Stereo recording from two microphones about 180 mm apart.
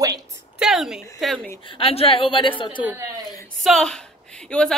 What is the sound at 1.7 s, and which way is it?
A woman's voice, 30° left (ahead or behind).